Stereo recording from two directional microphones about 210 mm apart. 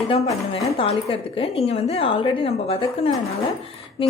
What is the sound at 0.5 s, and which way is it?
A woman's voice, 25° left (ahead or behind).